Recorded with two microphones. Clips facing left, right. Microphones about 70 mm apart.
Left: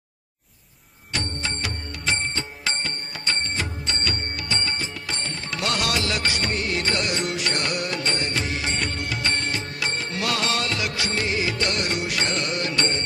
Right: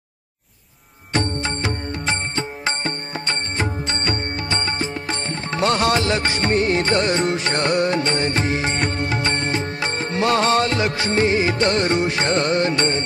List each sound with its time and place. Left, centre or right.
1.1 s music: right